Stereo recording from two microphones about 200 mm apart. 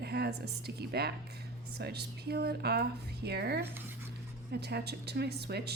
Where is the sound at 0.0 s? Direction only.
55° right (ahead or behind).